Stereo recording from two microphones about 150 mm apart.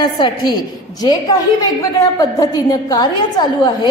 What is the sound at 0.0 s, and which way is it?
Speech, 30° left (ahead or behind).